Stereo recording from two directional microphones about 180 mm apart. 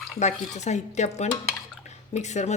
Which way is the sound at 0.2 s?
40° left (ahead or behind).